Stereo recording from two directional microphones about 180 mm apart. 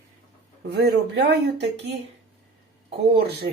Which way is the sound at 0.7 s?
65° right (ahead or behind).